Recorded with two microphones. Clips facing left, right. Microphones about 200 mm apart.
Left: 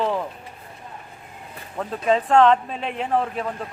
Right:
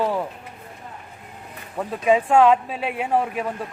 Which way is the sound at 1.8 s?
10° right (ahead or behind).